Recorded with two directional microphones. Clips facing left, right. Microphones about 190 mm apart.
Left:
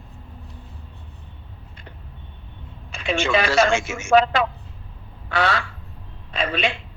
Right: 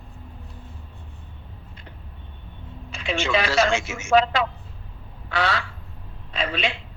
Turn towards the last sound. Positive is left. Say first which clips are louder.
# left 3 dB
turn(degrees=50)  # may be behind; listen again after turning